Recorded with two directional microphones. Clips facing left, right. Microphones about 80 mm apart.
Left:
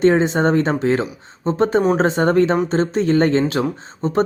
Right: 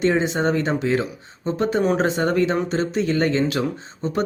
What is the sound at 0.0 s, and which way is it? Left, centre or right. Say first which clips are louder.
Speech: left 5 dB; left.